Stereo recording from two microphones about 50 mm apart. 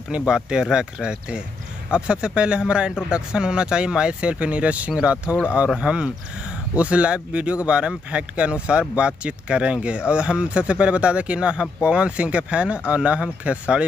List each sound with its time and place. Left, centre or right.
0.3 s speech: centre